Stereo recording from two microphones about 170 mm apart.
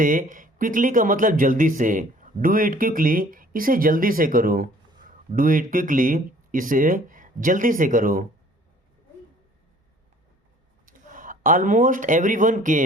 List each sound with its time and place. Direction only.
0.0 s speech: 50° right (ahead or behind)
10.8 s speech: 50° right (ahead or behind)